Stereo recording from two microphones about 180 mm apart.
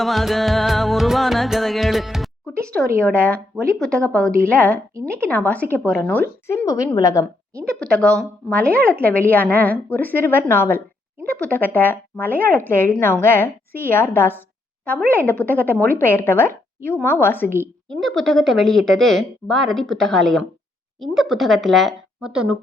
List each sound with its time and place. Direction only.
0.0 s music: centre (ahead or behind)
3.0 s speech: 5° left (ahead or behind)
7.6 s speech: 5° left (ahead or behind)
17.8 s speech: centre (ahead or behind)